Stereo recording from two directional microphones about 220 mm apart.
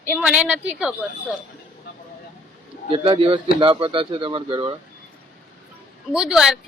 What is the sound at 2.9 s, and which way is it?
Speech, 25° right (ahead or behind).